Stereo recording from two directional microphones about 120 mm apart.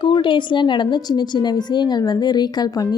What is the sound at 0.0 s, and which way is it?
A woman's voice, 45° left (ahead or behind).